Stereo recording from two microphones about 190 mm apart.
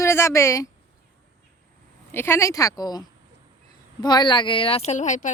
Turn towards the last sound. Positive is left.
turn(degrees=40)  # may be behind; listen again after turning